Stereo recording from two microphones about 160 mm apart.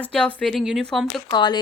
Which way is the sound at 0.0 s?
10° left (ahead or behind).